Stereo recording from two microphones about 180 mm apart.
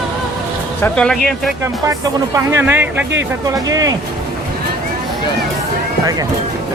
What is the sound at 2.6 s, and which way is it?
Speech, 10° right (ahead or behind).